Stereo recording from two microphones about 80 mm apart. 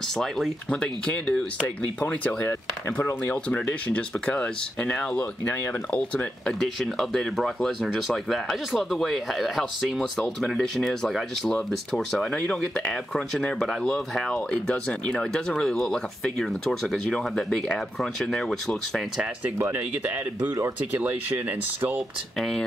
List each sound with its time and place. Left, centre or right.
0.7 s speech: centre
6.6 s speech: centre
20.9 s speech: right
22.4 s speech: centre